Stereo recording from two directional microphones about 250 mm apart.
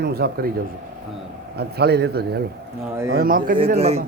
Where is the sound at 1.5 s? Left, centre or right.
Right.